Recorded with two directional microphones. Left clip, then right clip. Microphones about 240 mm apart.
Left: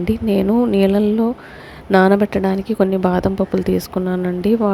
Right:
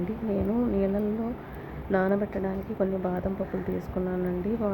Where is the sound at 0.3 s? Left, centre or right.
Left.